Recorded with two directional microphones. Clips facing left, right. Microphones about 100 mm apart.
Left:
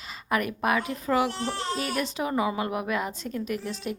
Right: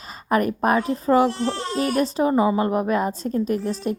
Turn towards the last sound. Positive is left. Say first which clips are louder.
# right 7 dB
turn(degrees=-40)  # may be behind; listen again after turning